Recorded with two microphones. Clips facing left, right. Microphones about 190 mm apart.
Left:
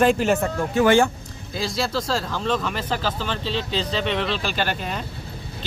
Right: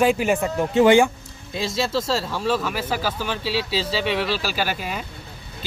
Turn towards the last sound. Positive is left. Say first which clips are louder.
# even
turn(degrees=-5)  # may be behind; listen again after turning